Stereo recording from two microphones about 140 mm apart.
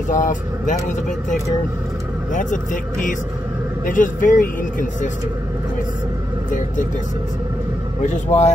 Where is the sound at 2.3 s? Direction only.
65° left (ahead or behind).